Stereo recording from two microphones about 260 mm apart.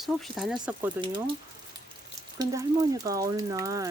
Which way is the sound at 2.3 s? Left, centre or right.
Centre.